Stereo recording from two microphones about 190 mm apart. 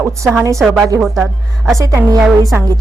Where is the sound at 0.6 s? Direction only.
Centre (ahead or behind).